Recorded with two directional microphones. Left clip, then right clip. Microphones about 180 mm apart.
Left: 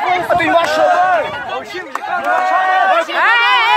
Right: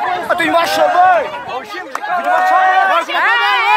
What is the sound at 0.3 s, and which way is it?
Speech, 50° right (ahead or behind).